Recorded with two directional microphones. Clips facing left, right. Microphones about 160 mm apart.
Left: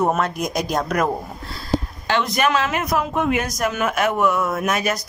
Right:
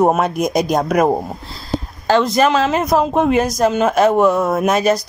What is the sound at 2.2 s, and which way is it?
Speech, 30° right (ahead or behind).